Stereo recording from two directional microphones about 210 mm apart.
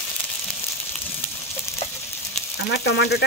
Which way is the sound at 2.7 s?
55° left (ahead or behind).